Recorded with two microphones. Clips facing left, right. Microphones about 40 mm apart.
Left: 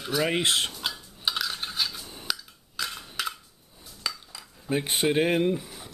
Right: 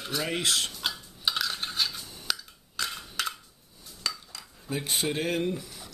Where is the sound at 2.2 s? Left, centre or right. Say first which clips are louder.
Even; centre.